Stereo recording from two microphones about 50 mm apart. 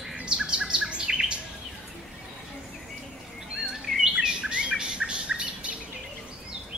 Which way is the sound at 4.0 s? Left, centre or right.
Centre.